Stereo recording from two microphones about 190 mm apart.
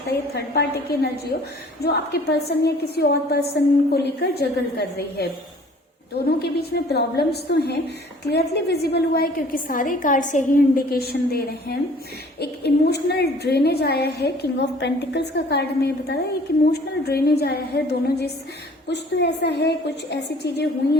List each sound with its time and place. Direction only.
0.1 s a woman's voice: 60° left (ahead or behind)
6.4 s a woman's voice: 55° left (ahead or behind)